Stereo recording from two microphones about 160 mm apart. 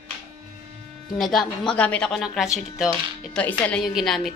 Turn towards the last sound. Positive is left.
turn(degrees=0)  # may be behind; listen again after turning